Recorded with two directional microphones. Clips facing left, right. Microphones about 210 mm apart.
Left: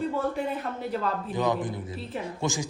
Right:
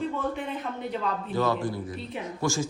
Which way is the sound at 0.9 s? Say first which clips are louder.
Left 2 dB; 5° left (ahead or behind).